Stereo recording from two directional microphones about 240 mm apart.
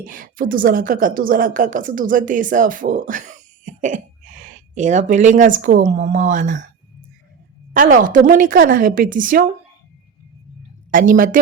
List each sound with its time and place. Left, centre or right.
0.0 s a woman's voice: right
7.7 s a woman's voice: right
10.9 s a woman's voice: right